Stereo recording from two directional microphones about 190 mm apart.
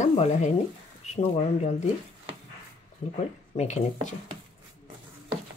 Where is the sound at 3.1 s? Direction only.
35° left (ahead or behind).